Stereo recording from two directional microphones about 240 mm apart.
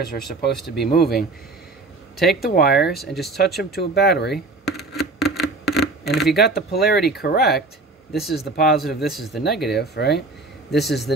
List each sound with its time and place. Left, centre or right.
0.0 s speech: left
2.4 s speech: left
4.6 s a sound: centre
6.3 s speech: left
8.1 s speech: centre
8.4 s speech: left
8.8 s a man's voice: centre
9.7 s speech: left
10.8 s a man's voice: centre